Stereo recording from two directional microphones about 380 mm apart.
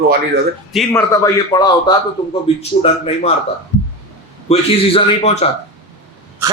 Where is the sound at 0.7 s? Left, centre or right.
Centre.